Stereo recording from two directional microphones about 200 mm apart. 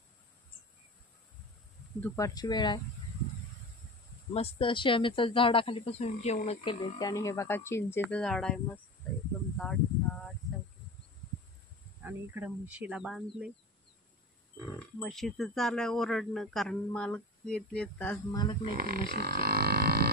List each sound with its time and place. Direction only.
2.0 s speech: 15° left (ahead or behind)
4.3 s speech: 30° left (ahead or behind); by 8.8 s 5° left (ahead or behind)
9.6 s a sound: 5° left (ahead or behind)
12.0 s speech: 10° right (ahead or behind)
15.0 s speech: centre (ahead or behind)
18.3 s speech: 20° left (ahead or behind)
18.7 s a sound: 45° right (ahead or behind)